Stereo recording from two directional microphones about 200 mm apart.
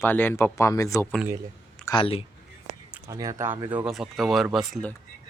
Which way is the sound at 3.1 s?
15° right (ahead or behind).